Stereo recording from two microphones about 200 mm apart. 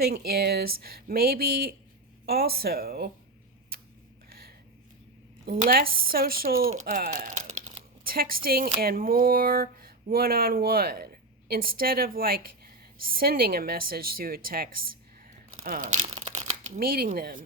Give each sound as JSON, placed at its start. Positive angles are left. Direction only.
{"t": 0.0, "sound": "speech", "side_deg": -50}
{"t": 5.5, "sound": "speech", "side_deg": -45}
{"t": 7.6, "sound": "a sound", "side_deg": -45}
{"t": 8.4, "sound": "speech", "side_deg": -50}